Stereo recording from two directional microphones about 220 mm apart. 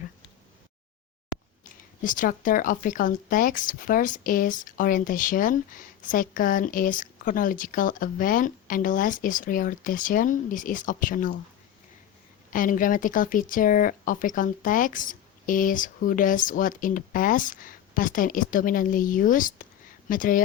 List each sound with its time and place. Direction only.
2.0 s speech: 35° left (ahead or behind)
12.5 s speech: 35° left (ahead or behind)